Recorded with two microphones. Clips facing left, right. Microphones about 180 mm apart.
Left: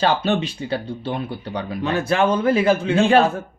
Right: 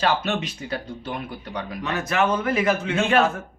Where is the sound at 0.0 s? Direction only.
30° left (ahead or behind).